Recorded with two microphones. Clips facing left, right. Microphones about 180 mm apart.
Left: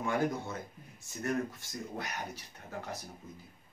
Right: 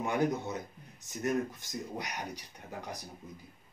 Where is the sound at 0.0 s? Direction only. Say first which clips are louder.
Right 2 dB; 20° right (ahead or behind).